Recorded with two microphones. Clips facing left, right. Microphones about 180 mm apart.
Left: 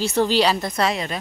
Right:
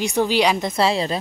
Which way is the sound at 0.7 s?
30° right (ahead or behind).